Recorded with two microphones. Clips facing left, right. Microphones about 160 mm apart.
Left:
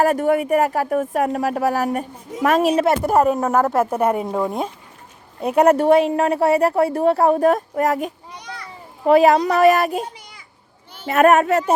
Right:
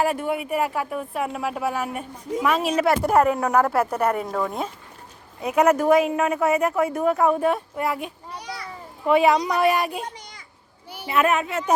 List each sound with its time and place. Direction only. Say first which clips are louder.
0.0 s speech: left 7 dB; 45° left (ahead or behind)
2.7 s speech: left 3 dB; 25° left (ahead or behind)
3.0 s speech: left 2 dB; centre (ahead or behind)
4.3 s speech: left 4 dB; 20° left (ahead or behind)
5.4 s a woman's voice: left 4 dB; 35° left (ahead or behind)
8.4 s children playing: right 3 dB; 10° right (ahead or behind)
9.0 s speech: left 5 dB; 40° left (ahead or behind)
11.1 s speech: left 8 dB; 45° left (ahead or behind)